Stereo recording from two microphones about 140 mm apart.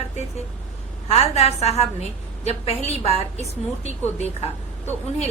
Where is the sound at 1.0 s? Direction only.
50° left (ahead or behind).